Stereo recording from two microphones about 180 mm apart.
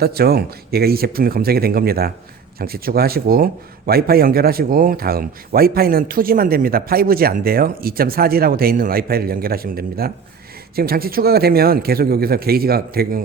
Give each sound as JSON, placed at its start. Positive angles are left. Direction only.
{"t": 0.0, "sound": "a man's voice", "side_deg": -60}